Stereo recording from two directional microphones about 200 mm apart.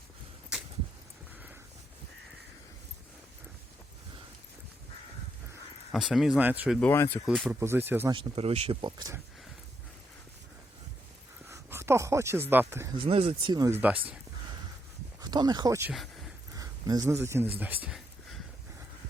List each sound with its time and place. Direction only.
5.9 s speech: centre (ahead or behind)
6.7 s speech: 10° left (ahead or behind)
7.3 s speech: centre (ahead or behind)
7.6 s speech: 10° right (ahead or behind)
8.1 s speech: 25° right (ahead or behind)
11.4 s speech: 15° right (ahead or behind)
13.0 s speech: 30° right (ahead or behind); by 14.0 s 10° right (ahead or behind)
15.2 s speech: 20° right (ahead or behind)
15.9 s a sound: centre (ahead or behind)
16.6 s speech: 20° right (ahead or behind)
17.6 s a sound: 10° right (ahead or behind)